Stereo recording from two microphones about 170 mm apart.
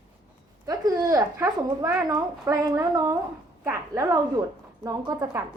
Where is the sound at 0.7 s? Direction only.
20° right (ahead or behind).